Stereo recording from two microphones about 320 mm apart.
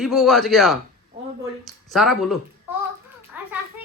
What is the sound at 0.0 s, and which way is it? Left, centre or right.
Speech, centre.